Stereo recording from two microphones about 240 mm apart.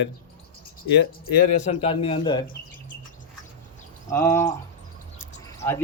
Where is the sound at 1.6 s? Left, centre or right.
Left.